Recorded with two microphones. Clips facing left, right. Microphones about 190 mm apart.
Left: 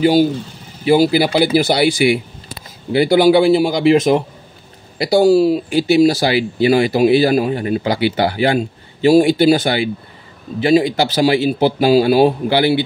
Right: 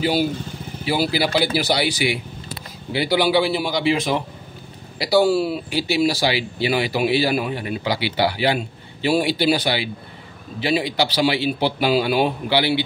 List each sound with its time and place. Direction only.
0.0 s speech: 45° left (ahead or behind)